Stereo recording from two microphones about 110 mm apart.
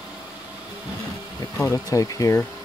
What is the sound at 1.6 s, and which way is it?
Speech, 30° left (ahead or behind).